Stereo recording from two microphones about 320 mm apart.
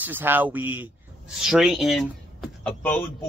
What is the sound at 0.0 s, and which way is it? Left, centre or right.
Speech, centre.